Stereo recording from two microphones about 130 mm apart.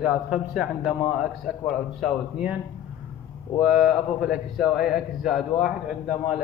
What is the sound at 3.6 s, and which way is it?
A man's voice, centre (ahead or behind).